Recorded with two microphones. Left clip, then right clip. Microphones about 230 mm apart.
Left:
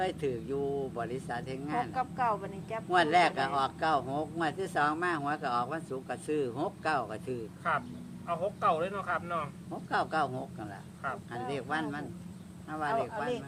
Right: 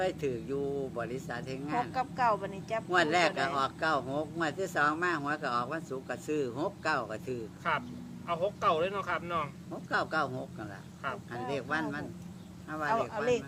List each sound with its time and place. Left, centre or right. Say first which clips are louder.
0.0 s speech: even; centre
1.9 s speech: right 3 dB; centre
2.9 s speech: left 2 dB; centre
7.6 s speech: left 1 dB; right
9.9 s speech: left 1 dB; centre